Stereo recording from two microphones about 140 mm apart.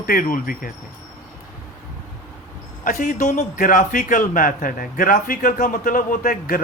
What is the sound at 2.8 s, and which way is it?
A man's voice, 70° left (ahead or behind).